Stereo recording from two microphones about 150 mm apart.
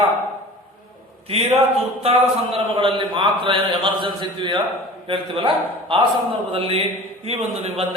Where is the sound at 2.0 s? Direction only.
40° right (ahead or behind).